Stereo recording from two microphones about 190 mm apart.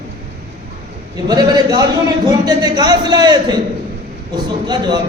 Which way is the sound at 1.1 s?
20° right (ahead or behind).